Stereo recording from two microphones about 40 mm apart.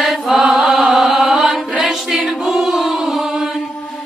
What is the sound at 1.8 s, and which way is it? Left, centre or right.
Choir, centre.